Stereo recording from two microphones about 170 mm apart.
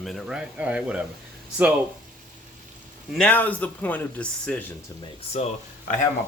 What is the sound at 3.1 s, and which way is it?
Speech, 10° left (ahead or behind).